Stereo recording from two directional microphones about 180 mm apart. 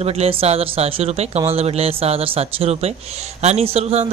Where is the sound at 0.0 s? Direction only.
35° right (ahead or behind).